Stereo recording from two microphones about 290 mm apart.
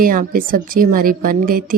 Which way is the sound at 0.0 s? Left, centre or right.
Right.